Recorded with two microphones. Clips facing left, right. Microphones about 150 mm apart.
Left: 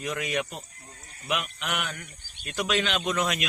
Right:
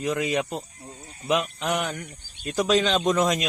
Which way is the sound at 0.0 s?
30° right (ahead or behind).